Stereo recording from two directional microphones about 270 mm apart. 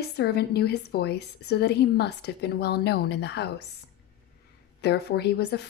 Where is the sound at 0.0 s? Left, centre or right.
Left.